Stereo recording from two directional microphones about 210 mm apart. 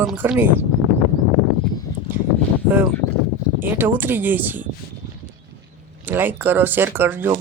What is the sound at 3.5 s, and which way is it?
Speech, 10° right (ahead or behind).